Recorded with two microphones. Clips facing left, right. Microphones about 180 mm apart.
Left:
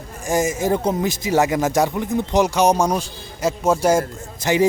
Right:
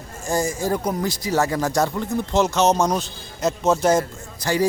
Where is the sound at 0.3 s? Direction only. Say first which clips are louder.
Left 3 dB; 20° left (ahead or behind).